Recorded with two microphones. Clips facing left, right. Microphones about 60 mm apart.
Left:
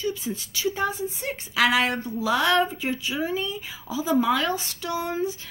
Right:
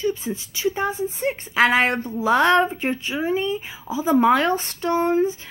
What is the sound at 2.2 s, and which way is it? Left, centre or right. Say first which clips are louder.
Speech: right 5 dB; right.